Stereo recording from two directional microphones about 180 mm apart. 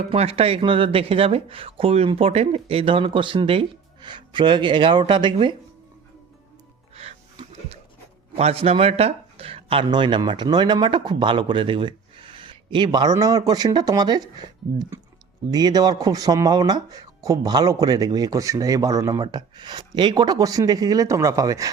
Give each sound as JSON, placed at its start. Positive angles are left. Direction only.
{"t": 0.1, "sound": "speech", "side_deg": -30}
{"t": 6.9, "sound": "music", "side_deg": -35}
{"t": 8.4, "sound": "speech", "side_deg": -35}